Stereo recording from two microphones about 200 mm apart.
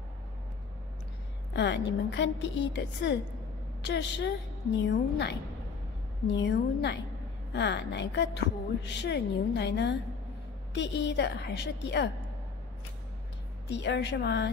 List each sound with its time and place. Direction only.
1.5 s a woman's voice: 60° left (ahead or behind)
13.7 s a woman's voice: 60° left (ahead or behind)